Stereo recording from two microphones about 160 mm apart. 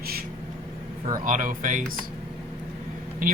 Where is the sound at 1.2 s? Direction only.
55° right (ahead or behind).